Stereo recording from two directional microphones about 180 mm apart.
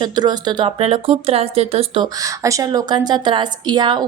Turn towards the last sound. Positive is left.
turn(degrees=-25)  # may be behind; listen again after turning